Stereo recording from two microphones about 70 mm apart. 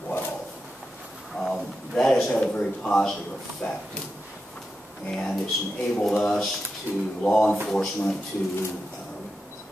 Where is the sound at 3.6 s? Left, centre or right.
Left.